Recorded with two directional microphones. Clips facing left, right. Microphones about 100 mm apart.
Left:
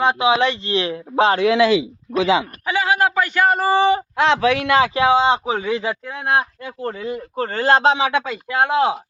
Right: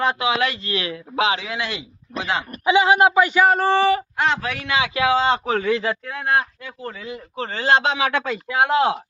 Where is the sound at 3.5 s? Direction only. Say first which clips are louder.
Even; 5° left (ahead or behind).